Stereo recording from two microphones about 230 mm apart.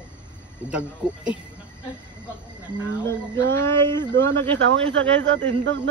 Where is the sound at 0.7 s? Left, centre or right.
Centre.